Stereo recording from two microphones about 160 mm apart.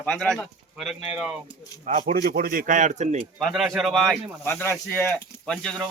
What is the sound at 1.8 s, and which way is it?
Speech, 45° right (ahead or behind).